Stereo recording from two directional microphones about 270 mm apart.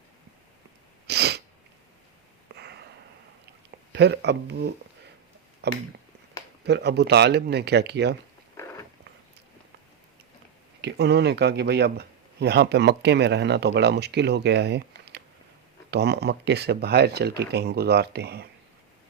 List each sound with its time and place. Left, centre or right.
1.0 s sneeze: right
2.6 s a sound: right
3.9 s speech: right
10.8 s speech: right